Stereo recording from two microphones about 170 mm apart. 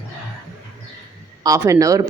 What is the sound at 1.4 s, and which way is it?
Speech, 20° right (ahead or behind).